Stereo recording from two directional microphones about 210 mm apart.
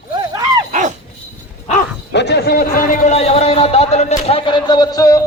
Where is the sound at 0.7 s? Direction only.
35° right (ahead or behind).